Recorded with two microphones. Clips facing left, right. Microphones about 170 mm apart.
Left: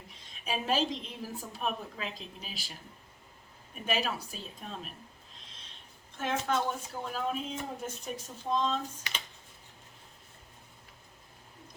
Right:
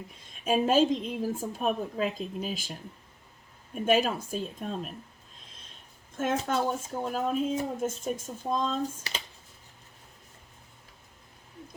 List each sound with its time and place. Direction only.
0.4 s speech: 45° right (ahead or behind)
3.8 s speech: 45° right (ahead or behind)
6.1 s speech: 40° right (ahead or behind)